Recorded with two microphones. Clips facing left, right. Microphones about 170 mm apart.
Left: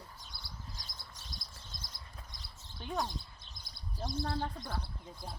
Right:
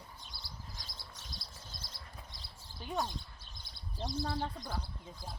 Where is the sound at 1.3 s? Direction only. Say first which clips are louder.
Even; 5° right (ahead or behind).